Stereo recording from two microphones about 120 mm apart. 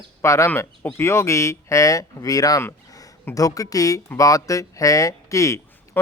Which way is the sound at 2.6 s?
30° left (ahead or behind).